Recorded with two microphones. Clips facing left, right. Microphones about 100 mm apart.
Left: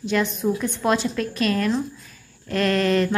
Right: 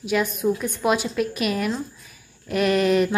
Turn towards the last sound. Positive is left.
turn(degrees=-15)  # may be behind; listen again after turning